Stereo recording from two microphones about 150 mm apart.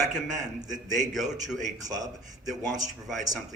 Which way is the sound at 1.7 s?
25° right (ahead or behind).